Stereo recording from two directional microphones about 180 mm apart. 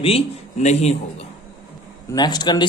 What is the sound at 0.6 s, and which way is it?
Speech, 40° left (ahead or behind).